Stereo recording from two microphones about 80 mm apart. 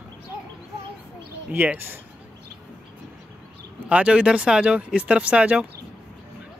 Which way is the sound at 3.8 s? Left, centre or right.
Centre.